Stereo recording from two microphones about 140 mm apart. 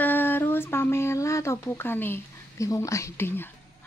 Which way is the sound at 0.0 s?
15° left (ahead or behind).